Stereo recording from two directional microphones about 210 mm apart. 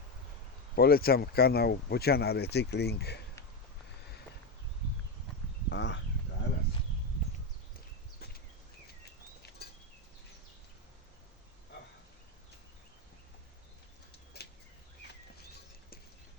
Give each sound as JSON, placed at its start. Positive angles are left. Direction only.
{"t": 0.8, "sound": "speech", "side_deg": 45}
{"t": 5.6, "sound": "speech", "side_deg": 60}